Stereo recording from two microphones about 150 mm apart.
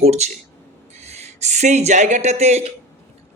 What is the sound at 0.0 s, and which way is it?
A man's voice, 45° right (ahead or behind).